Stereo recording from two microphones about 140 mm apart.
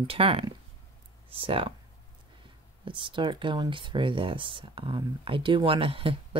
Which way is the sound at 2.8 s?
35° right (ahead or behind).